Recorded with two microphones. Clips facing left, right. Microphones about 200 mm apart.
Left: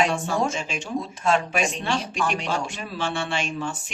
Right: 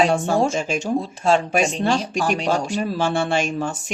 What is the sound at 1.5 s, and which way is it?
Speech, 40° right (ahead or behind).